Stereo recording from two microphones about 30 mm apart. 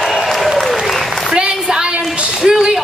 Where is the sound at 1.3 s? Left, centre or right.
Right.